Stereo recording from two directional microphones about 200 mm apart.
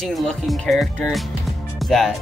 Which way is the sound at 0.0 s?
Centre (ahead or behind).